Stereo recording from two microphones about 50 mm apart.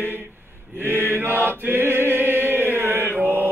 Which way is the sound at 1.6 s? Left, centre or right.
Right.